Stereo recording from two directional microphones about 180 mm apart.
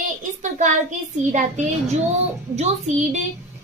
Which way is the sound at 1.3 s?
40° right (ahead or behind).